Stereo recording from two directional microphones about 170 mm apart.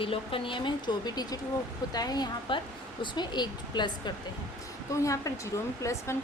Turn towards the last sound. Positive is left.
turn(degrees=15)  # may be behind; listen again after turning